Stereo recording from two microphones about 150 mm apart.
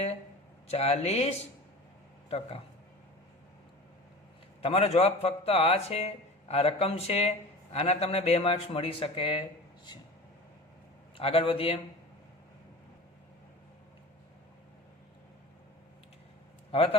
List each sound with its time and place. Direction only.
0.7 s speech: 45° left (ahead or behind)
4.6 s speech: 45° left (ahead or behind)
11.2 s a man's voice: 40° left (ahead or behind)
16.7 s a man's voice: 40° left (ahead or behind)